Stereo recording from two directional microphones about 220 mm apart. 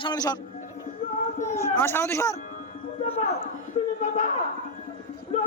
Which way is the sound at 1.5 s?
10° left (ahead or behind).